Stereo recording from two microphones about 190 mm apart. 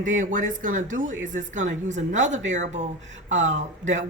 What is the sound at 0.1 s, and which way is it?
Speech, 40° right (ahead or behind).